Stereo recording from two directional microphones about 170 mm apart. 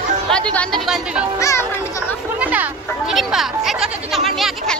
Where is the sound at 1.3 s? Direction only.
20° left (ahead or behind).